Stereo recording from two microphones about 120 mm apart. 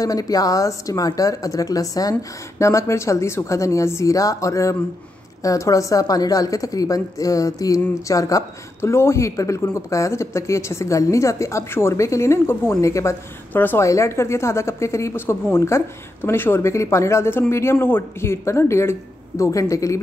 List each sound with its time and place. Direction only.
0.0 s a woman's voice: 30° left (ahead or behind)